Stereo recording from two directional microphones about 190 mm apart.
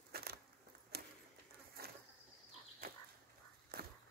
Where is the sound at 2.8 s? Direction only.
50° right (ahead or behind).